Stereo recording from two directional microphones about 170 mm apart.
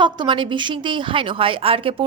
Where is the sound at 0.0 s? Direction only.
30° right (ahead or behind).